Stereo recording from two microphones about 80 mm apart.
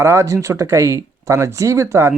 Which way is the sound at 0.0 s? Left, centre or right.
Right.